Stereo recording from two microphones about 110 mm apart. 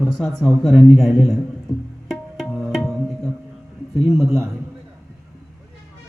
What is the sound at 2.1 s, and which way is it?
Music, centre (ahead or behind).